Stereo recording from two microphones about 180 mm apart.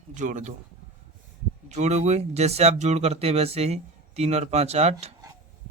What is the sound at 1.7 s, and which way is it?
Speech, 40° right (ahead or behind).